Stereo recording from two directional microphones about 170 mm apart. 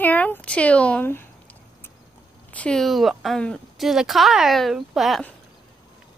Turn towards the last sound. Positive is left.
turn(degrees=0)  # may be behind; listen again after turning